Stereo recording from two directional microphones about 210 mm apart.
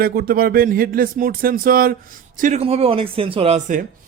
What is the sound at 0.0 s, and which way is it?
Speech, 45° right (ahead or behind).